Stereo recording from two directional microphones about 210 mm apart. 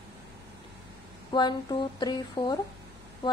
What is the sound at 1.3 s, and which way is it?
A woman's voice, 20° left (ahead or behind).